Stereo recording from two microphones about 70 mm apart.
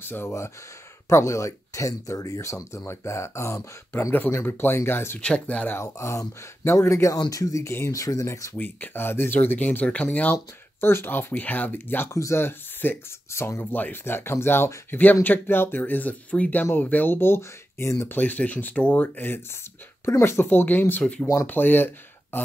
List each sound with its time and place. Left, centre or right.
0.0 s speech: left
1.0 s speech: left
4.1 s speech: left
5.2 s speech: centre
5.7 s speech: left
7.2 s speech: left
8.5 s speech: left
10.8 s speech: left
12.1 s speech: left
12.4 s speech: left
14.9 s speech: left
18.0 s speech: left